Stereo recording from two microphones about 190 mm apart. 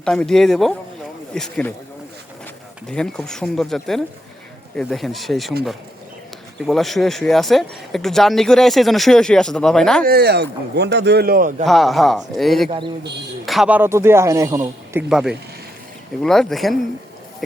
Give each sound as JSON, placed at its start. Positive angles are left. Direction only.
{"t": 0.0, "sound": "speech", "side_deg": 5}
{"t": 2.9, "sound": "speech", "side_deg": 5}
{"t": 6.7, "sound": "speech", "side_deg": 0}
{"t": 10.1, "sound": "speech", "side_deg": -55}
{"t": 11.6, "sound": "a man's voice", "side_deg": 0}
{"t": 15.1, "sound": "speech", "side_deg": -5}